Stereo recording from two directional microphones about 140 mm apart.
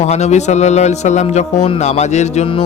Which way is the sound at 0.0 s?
55° left (ahead or behind).